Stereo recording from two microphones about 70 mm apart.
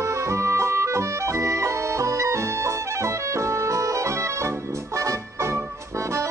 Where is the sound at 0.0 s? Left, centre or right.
Right.